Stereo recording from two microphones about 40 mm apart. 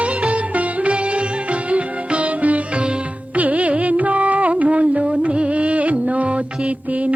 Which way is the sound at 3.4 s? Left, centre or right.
Right.